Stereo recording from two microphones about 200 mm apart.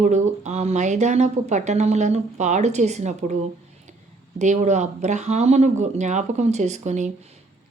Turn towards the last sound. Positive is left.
turn(degrees=-35)  # may be behind; listen again after turning